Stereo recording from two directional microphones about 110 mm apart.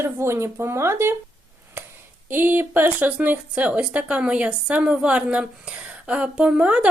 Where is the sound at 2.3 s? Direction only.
20° right (ahead or behind).